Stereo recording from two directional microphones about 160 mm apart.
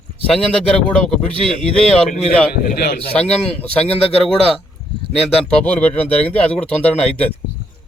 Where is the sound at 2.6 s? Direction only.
80° left.